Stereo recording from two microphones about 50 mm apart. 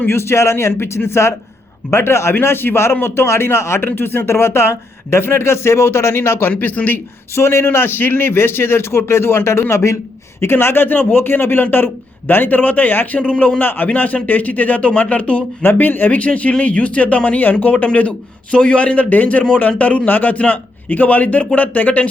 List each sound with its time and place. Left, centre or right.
0.1 s speech: left
2.4 s a man's voice: left
3.8 s speech: left
6.6 s speech: left
7.3 s speech: left
10.4 s a man's voice: left